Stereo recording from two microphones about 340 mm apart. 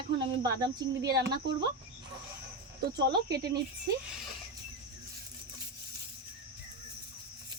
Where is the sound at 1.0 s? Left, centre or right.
Right.